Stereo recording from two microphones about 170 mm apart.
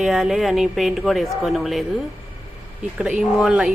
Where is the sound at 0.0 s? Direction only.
Centre (ahead or behind).